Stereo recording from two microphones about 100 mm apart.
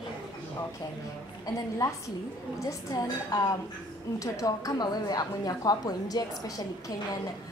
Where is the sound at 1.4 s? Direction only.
35° left (ahead or behind).